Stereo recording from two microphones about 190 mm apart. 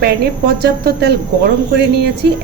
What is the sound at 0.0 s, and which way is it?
A woman's voice, 55° right (ahead or behind).